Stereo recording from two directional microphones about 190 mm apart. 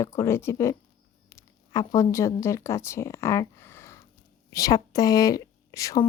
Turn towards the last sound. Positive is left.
turn(degrees=20)  # may be behind; listen again after turning